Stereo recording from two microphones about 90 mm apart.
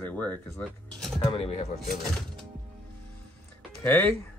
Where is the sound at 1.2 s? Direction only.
90° left.